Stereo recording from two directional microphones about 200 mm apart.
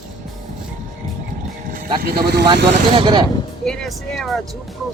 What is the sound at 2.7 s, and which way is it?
Speech, 25° right (ahead or behind).